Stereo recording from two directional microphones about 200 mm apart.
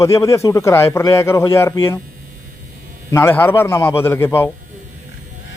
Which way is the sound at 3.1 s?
15° left (ahead or behind).